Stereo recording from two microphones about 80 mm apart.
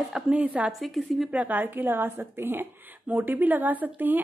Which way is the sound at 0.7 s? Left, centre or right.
Centre.